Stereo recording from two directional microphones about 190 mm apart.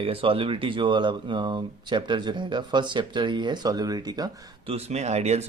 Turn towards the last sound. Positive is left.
turn(degrees=-35)  # may be behind; listen again after turning